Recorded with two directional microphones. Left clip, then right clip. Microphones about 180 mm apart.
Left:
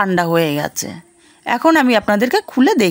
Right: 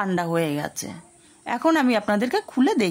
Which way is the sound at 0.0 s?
30° left (ahead or behind).